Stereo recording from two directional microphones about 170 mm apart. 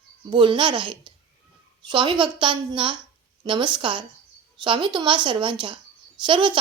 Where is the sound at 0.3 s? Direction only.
30° right (ahead or behind).